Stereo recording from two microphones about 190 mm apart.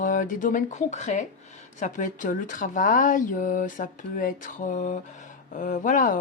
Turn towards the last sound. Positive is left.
turn(degrees=45)  # may be behind; listen again after turning